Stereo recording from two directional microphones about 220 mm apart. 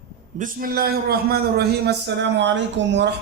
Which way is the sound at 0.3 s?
40° right (ahead or behind).